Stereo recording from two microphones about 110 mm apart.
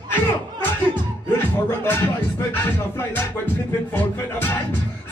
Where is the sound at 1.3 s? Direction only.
20° left (ahead or behind).